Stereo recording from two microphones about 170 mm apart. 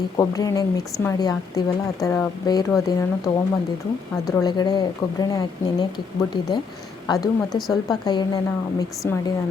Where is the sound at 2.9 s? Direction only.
25° left (ahead or behind).